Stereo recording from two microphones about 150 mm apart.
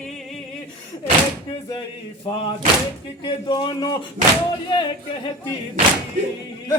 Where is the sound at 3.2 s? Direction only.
30° left (ahead or behind).